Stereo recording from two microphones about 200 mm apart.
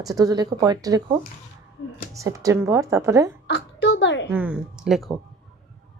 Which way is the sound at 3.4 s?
55° left (ahead or behind).